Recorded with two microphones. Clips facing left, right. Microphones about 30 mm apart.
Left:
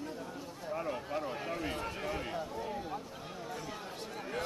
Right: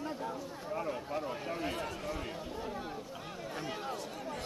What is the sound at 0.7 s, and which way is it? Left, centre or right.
Speech, centre.